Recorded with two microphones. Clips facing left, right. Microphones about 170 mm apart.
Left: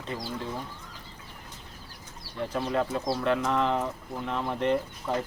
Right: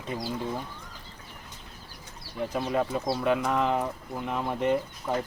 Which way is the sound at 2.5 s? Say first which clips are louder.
Even; 10° right (ahead or behind).